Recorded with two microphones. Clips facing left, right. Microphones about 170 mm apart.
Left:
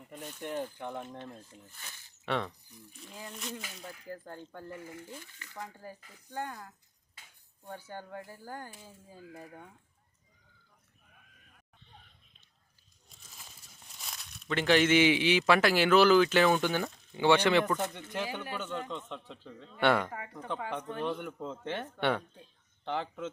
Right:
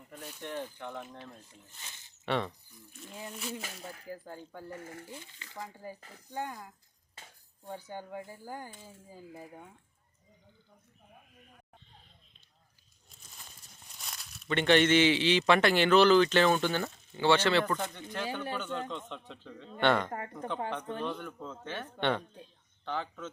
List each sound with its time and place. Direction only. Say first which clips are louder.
0.4 s speech: left 3 dB; 15° left (ahead or behind)
1.7 s speech: left 1 dB; 20° right (ahead or behind)
2.2 s a man's voice: right 1 dB; centre (ahead or behind)
4.7 s speech: even; 45° right (ahead or behind)
5.1 s speech: even; 20° right (ahead or behind)
5.5 s speech: right 1 dB; 10° right (ahead or behind)
6.0 s speech: right 4 dB; 40° right (ahead or behind)
6.3 s speech: right 1 dB; 10° right (ahead or behind)
13.1 s speech: even; centre (ahead or behind); by 18.4 s 15° left (ahead or behind)
18.5 s a man's voice: right 1 dB; 5° left (ahead or behind)
20.1 s speech: right 4 dB; 45° right (ahead or behind)
21.0 s speech: left 2 dB; 20° left (ahead or behind)
22.9 s speech: left 2 dB; 25° left (ahead or behind)